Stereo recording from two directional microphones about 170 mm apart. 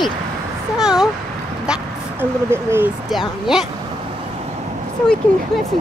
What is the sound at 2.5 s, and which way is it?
Speech, 15° right (ahead or behind).